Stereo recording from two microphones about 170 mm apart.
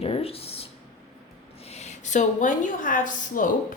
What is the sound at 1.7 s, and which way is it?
A woman's voice, 45° left (ahead or behind).